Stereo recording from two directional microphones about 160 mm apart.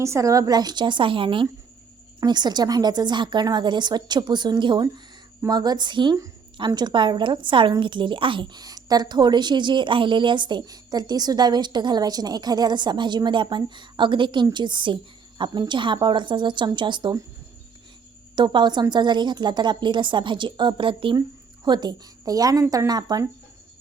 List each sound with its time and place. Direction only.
0.0 s a woman's voice: 20° right (ahead or behind)
18.3 s a woman's voice: 30° right (ahead or behind)